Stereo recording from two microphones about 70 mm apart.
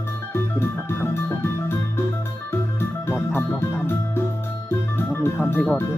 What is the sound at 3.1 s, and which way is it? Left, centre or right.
Organ, left.